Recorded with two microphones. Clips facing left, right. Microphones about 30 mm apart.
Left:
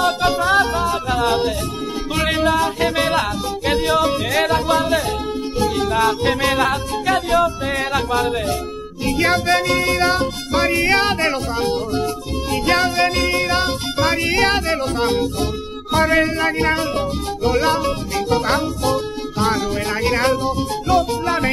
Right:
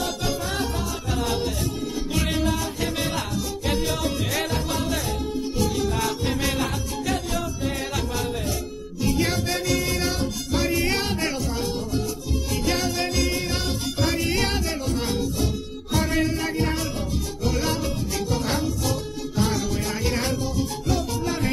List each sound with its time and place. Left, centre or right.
0.0 s music: left
6.2 s music: left